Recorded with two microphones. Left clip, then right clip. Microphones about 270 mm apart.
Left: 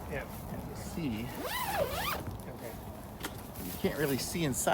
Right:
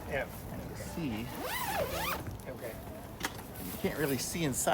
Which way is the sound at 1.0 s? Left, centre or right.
Centre.